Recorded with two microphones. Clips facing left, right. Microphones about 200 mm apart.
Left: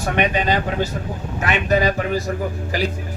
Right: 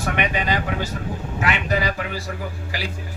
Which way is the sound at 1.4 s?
45° left (ahead or behind).